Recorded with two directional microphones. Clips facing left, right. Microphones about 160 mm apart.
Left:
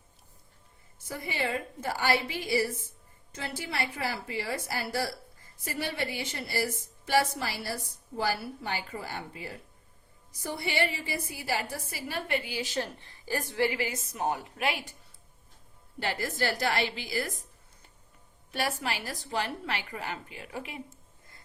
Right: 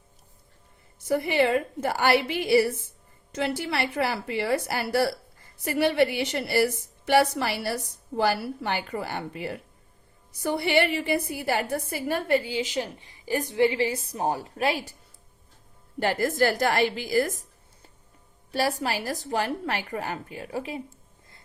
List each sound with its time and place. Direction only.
1.0 s a woman's voice: 70° right (ahead or behind); by 12.4 s 50° right (ahead or behind)
12.4 s a woman's voice: 25° right (ahead or behind)
16.0 s a woman's voice: 50° right (ahead or behind)
18.5 s a woman's voice: 35° right (ahead or behind)